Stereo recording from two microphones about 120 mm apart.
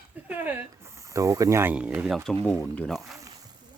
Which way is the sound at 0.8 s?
25° right (ahead or behind).